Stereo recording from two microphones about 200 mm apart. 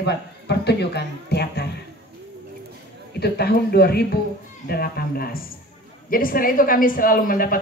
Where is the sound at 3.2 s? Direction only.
55° left (ahead or behind).